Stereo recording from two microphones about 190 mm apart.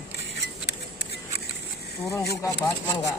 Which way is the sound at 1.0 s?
60° left (ahead or behind).